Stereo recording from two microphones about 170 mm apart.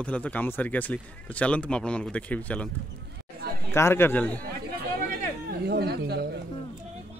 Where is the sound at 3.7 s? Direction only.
15° left (ahead or behind).